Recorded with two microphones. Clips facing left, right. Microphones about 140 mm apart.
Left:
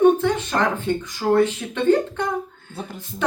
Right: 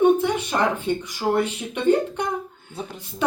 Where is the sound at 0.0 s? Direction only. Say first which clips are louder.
Left 2 dB; 15° right (ahead or behind).